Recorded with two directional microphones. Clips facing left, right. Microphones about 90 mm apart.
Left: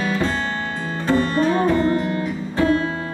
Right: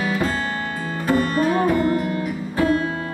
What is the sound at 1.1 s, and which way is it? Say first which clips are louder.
Music: left 1 dB; 25° left (ahead or behind).